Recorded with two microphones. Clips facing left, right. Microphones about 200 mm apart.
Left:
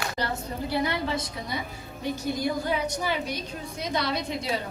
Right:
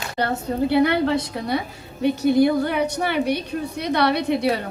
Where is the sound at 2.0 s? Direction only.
65° right (ahead or behind).